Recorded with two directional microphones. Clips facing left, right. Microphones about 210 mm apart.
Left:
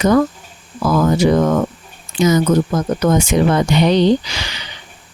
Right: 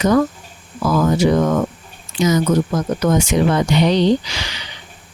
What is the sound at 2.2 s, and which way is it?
Speech, 50° left (ahead or behind).